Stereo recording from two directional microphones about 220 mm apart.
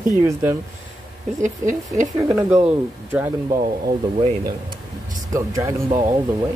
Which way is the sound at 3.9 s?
25° right (ahead or behind).